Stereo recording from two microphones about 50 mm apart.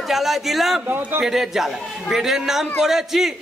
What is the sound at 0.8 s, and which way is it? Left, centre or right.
Speech, right.